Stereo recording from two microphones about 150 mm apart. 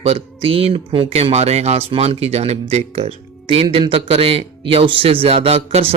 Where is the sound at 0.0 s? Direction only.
40° right (ahead or behind).